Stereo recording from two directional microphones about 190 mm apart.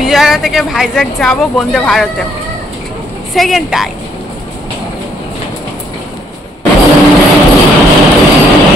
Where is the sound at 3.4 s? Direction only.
Centre (ahead or behind).